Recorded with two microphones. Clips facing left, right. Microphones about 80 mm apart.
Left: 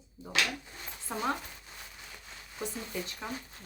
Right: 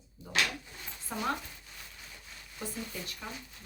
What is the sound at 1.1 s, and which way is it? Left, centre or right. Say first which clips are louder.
Speech: left 1 dB; left.